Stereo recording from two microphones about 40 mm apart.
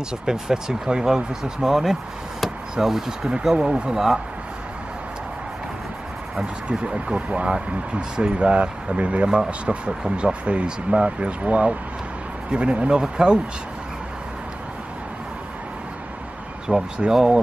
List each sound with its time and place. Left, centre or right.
0.3 s speech: centre
6.8 s speech: right
7.2 s speech: right
16.6 s speech: right